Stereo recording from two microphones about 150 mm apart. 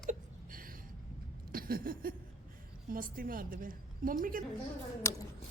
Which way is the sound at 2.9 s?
70° right (ahead or behind).